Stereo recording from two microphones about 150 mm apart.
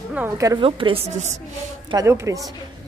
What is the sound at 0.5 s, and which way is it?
Speech, 35° right (ahead or behind).